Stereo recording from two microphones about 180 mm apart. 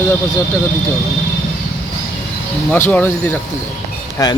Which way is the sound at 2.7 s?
10° left (ahead or behind).